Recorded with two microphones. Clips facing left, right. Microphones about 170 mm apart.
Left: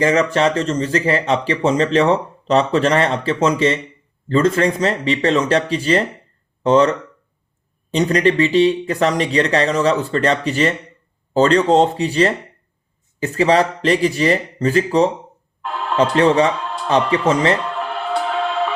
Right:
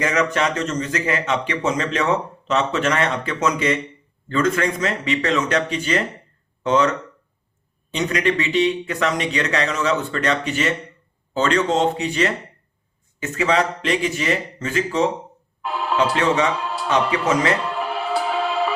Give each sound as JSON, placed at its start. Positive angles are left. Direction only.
{"t": 0.0, "sound": "speech", "side_deg": 30}
{"t": 7.9, "sound": "speech", "side_deg": 35}
{"t": 15.6, "sound": "music", "side_deg": -5}
{"t": 16.1, "sound": "speech", "side_deg": 35}
{"t": 16.6, "sound": "music", "side_deg": -5}
{"t": 17.1, "sound": "speech", "side_deg": 30}
{"t": 17.6, "sound": "music", "side_deg": -5}